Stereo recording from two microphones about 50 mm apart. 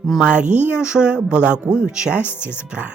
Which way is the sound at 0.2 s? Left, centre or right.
Right.